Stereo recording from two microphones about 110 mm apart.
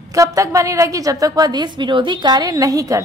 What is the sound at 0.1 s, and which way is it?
A woman's voice, 30° right (ahead or behind).